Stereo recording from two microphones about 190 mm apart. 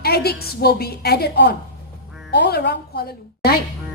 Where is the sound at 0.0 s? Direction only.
55° left (ahead or behind).